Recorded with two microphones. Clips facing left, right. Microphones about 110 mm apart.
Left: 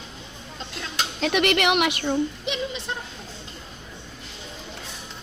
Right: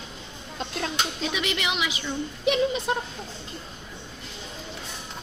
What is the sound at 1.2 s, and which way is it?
Speech, 60° left (ahead or behind).